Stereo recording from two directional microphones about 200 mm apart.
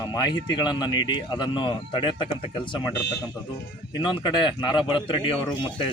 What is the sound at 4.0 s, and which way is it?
Speech, 20° left (ahead or behind).